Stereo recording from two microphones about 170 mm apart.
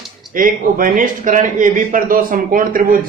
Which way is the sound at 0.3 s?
55° right (ahead or behind).